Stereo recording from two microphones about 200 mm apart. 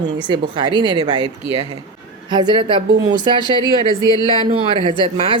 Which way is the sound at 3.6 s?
20° left (ahead or behind).